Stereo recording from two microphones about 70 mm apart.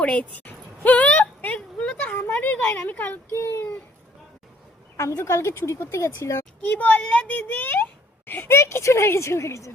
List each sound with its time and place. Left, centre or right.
0.0 s a sound: centre
2.2 s speech: left
3.3 s a woman's voice: left
5.2 s a woman's voice: left
6.6 s speech: left
8.4 s a woman's voice: left